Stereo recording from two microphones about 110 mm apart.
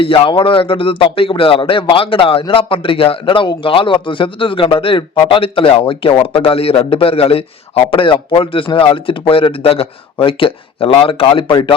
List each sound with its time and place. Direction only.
0.0 s a man's voice: 55° left (ahead or behind)